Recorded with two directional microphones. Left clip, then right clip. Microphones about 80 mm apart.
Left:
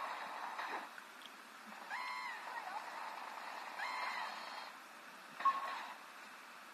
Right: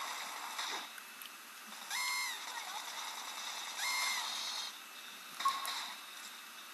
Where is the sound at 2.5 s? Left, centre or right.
Centre.